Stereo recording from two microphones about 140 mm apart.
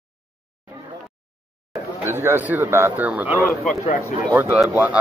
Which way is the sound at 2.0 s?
15° right (ahead or behind).